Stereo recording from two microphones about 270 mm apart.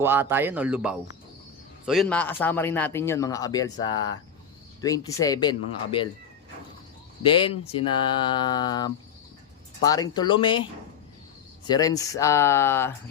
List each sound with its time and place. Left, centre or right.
0.0 s speech: centre
7.2 s speech: centre